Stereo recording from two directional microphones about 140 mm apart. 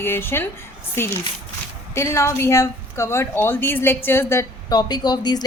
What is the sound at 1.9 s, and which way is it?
A woman's voice, 20° left (ahead or behind).